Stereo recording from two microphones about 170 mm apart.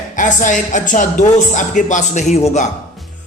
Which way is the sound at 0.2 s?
45° left (ahead or behind).